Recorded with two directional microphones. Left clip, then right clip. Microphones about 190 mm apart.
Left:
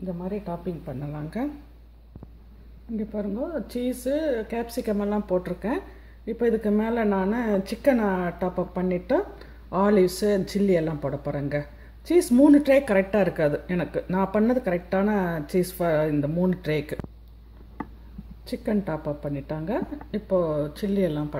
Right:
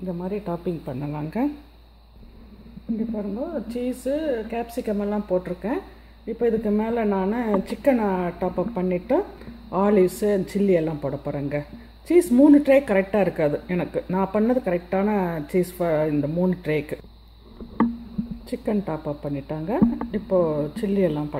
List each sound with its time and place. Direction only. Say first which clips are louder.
0.2 s speech: right 5 dB; 40° right (ahead or behind)
3.2 s speech: right 1 dB; centre (ahead or behind)
18.5 s speech: right 1 dB; 15° right (ahead or behind)